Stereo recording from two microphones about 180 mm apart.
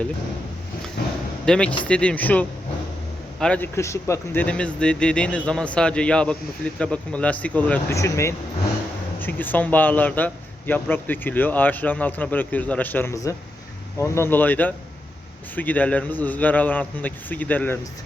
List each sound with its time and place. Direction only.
1.5 s a man's voice: 5° left (ahead or behind)